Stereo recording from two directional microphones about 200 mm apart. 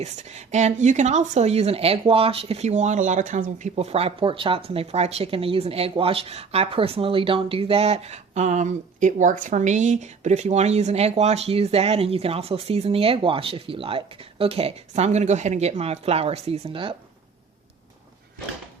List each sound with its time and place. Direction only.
0.0 s a woman's voice: 35° right (ahead or behind)